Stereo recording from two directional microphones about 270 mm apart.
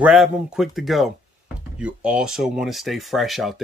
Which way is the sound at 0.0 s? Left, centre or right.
Centre.